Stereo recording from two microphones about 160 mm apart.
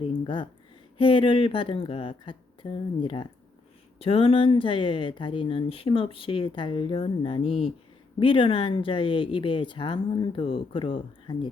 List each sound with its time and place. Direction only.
0.0 s speech: 30° left (ahead or behind)